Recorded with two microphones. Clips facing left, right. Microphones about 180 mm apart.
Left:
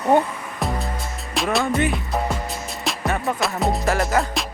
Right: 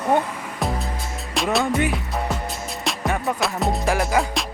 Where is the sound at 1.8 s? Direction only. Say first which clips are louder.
Left 1 dB; 5° right (ahead or behind).